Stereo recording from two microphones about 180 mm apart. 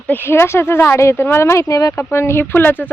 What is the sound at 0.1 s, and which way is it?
Speech, 10° left (ahead or behind).